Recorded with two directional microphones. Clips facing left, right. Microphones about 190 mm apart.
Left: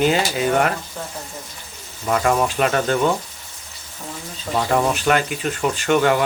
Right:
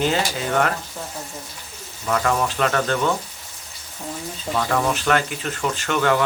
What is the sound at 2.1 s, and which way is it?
Speech, 20° left (ahead or behind).